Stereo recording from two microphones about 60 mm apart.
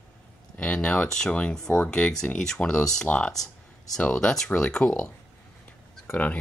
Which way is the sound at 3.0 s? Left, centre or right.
Left.